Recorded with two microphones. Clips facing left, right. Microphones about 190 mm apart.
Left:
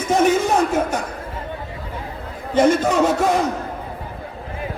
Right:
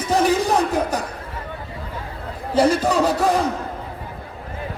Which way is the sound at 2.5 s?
35° right (ahead or behind).